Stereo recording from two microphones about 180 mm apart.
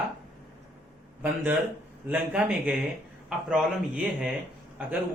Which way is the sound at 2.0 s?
10° right (ahead or behind).